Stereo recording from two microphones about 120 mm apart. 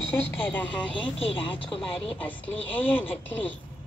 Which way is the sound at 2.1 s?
15° left (ahead or behind).